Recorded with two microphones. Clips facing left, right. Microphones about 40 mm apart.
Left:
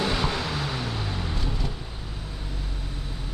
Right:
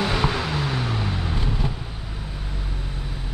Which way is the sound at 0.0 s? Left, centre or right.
Centre.